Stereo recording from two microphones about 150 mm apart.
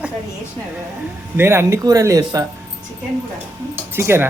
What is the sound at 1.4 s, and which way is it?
Speech, 15° right (ahead or behind).